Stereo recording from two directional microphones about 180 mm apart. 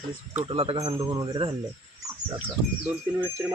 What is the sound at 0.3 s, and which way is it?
Speech, 35° right (ahead or behind).